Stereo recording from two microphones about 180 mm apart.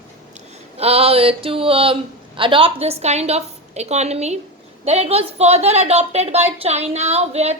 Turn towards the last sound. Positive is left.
turn(degrees=-35)  # may be behind; listen again after turning